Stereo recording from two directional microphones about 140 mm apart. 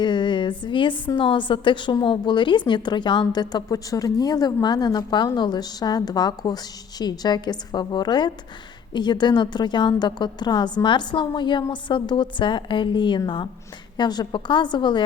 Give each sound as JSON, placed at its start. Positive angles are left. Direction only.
{"t": 0.0, "sound": "a woman's voice", "side_deg": 35}